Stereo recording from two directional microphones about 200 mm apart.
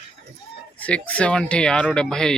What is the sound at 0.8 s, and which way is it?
Speech, 5° left (ahead or behind).